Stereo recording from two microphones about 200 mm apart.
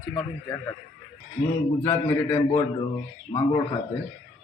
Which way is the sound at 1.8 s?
20° left (ahead or behind).